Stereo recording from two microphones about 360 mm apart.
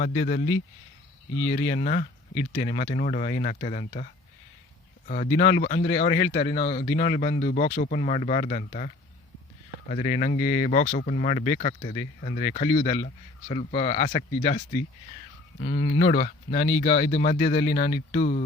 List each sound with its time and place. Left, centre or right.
0.0 s a man's voice: left
1.5 s a man's voice: centre
9.9 s speech: centre
15.6 s a man's voice: centre